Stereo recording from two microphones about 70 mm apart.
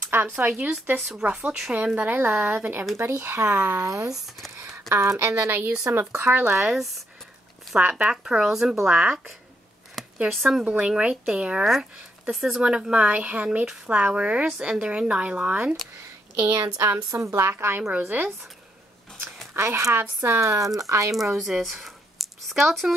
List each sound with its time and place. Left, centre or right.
0.0 s a woman's voice: right; by 1.7 s centre
2.0 s a woman's voice: right
4.6 s a sound: right
5.2 s speech: right
6.5 s speech: centre
8.0 s a woman's voice: centre
10.2 s speech: centre
10.6 s a woman's voice: centre
11.6 s a woman's voice: centre
16.8 s a woman's voice: right
17.2 s a woman's voice: right
19.5 s speech: right
20.2 s speech: right
21.1 s speech: centre